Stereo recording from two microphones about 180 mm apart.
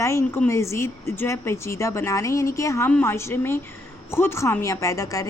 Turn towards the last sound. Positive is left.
turn(degrees=20)  # may be behind; listen again after turning